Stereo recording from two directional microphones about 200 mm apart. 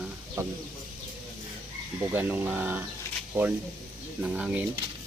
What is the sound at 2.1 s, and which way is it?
Speech, 10° right (ahead or behind).